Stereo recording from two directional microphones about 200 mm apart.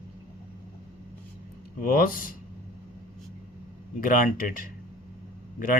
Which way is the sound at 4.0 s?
45° left (ahead or behind).